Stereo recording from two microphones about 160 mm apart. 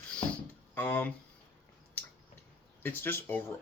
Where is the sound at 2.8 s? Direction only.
15° left (ahead or behind).